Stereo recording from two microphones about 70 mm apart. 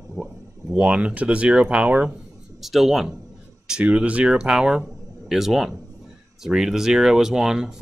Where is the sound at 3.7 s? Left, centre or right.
Centre.